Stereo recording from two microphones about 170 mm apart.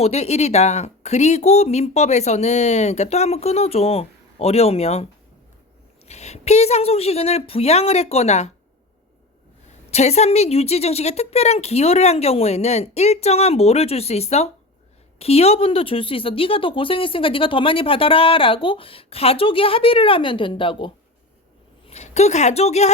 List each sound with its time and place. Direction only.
0.0 s speech: 40° left (ahead or behind)
6.1 s speech: 40° left (ahead or behind)
9.9 s speech: 40° left (ahead or behind)
21.8 s a woman's voice: 40° left (ahead or behind)